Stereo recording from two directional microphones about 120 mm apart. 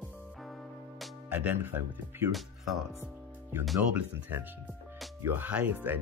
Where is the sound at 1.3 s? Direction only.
15° right (ahead or behind).